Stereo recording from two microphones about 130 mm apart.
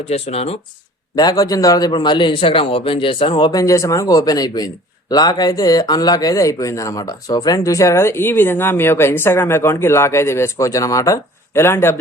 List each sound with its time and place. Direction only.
0.1 s speech: 55° left (ahead or behind)
1.1 s a man's voice: 30° left (ahead or behind)